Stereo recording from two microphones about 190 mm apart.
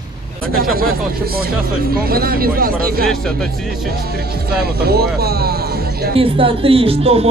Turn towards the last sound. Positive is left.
turn(degrees=-30)  # may be behind; listen again after turning